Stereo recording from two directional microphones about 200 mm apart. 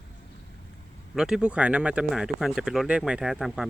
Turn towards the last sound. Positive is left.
turn(degrees=0)  # may be behind; listen again after turning